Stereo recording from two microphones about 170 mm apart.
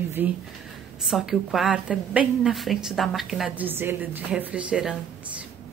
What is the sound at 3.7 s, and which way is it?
Speech, 10° right (ahead or behind).